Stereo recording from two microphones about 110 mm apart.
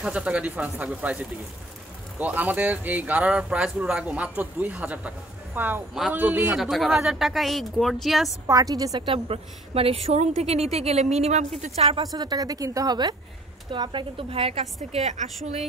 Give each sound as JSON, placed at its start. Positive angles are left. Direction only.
{"t": 0.0, "sound": "speech", "side_deg": -10}
{"t": 6.5, "sound": "speech", "side_deg": 0}
{"t": 8.5, "sound": "a woman's voice", "side_deg": -35}
{"t": 9.0, "sound": "a woman's voice", "side_deg": -60}
{"t": 12.0, "sound": "a woman's voice", "side_deg": -35}
{"t": 14.9, "sound": "a woman's voice", "side_deg": -90}